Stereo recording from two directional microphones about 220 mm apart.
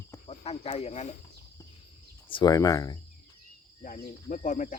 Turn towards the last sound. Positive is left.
turn(degrees=35)  # may be behind; listen again after turning